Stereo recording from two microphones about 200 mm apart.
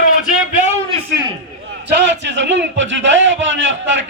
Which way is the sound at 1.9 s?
60° right (ahead or behind).